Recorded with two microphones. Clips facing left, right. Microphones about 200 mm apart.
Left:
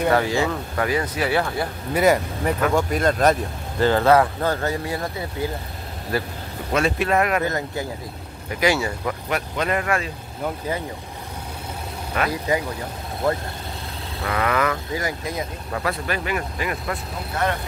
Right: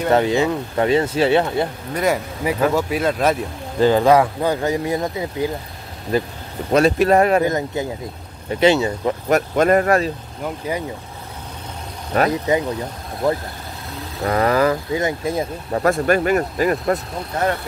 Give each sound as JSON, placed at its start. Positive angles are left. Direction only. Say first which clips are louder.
{"t": 0.1, "sound": "speech", "louder": "right 4 dB", "side_deg": -20}
{"t": 2.0, "sound": "speech", "louder": "left 2 dB", "side_deg": 0}
{"t": 3.8, "sound": "speech", "louder": "right 3 dB", "side_deg": -15}
{"t": 6.7, "sound": "speech", "louder": "right 7 dB", "side_deg": -40}
{"t": 7.4, "sound": "speech", "louder": "right 5 dB", "side_deg": -20}
{"t": 9.3, "sound": "speech", "louder": "right 10 dB", "side_deg": -45}
{"t": 12.3, "sound": "speech", "louder": "right 4 dB", "side_deg": -20}
{"t": 14.2, "sound": "speech", "louder": "right 6 dB", "side_deg": -35}
{"t": 15.8, "sound": "speech", "louder": "right 10 dB", "side_deg": -45}